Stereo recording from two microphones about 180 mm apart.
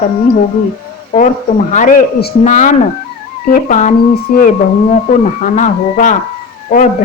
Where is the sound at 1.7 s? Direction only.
45° left (ahead or behind).